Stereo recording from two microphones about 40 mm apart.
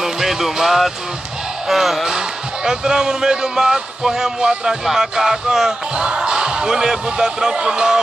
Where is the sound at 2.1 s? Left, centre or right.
Centre.